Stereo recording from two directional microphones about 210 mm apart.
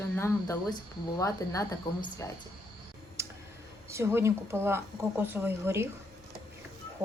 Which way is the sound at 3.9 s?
15° right (ahead or behind).